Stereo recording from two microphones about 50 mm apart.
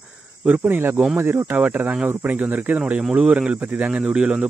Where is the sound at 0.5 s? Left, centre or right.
Right.